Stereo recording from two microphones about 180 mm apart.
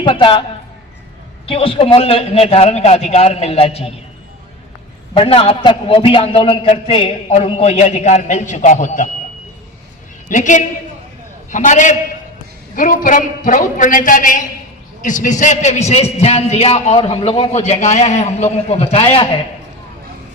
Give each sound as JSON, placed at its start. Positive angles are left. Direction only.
{"t": 0.0, "sound": "a man's voice", "side_deg": 30}
{"t": 1.5, "sound": "a man's voice", "side_deg": 30}
{"t": 5.1, "sound": "a man's voice", "side_deg": 30}
{"t": 10.2, "sound": "a man's voice", "side_deg": 45}